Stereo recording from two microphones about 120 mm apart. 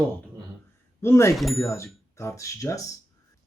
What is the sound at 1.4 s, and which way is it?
Speech, centre (ahead or behind).